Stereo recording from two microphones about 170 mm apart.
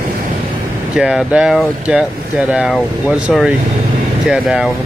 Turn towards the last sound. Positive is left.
turn(degrees=-5)  # may be behind; listen again after turning